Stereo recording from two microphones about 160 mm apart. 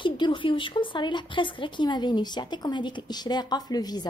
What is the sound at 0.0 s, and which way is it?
A woman's voice, 30° left (ahead or behind).